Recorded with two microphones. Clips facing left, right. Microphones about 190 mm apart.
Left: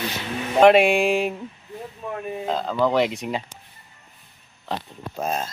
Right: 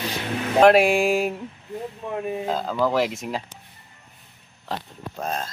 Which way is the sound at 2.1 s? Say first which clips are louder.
Right 4 dB; 15° right (ahead or behind).